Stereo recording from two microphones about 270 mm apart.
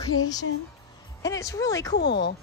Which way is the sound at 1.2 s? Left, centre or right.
Centre.